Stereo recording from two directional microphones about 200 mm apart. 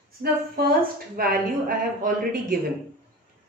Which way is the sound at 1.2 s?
45° right (ahead or behind).